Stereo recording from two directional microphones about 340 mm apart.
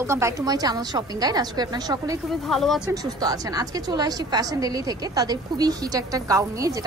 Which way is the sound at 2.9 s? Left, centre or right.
Centre.